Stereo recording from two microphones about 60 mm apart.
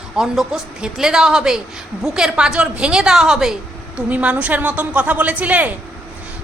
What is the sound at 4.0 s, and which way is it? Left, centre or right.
A woman's voice, right.